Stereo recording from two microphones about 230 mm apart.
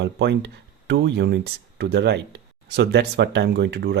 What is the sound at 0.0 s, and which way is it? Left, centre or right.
Speech, right.